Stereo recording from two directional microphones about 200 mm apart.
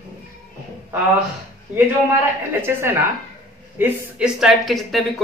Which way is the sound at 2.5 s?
10° right (ahead or behind).